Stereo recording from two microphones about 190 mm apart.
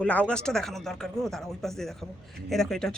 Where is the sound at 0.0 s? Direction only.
5° left (ahead or behind).